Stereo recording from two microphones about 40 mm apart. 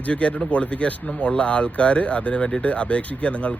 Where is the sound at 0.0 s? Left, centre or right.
Left.